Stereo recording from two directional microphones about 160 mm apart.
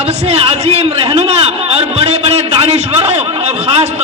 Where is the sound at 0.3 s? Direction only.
40° right (ahead or behind).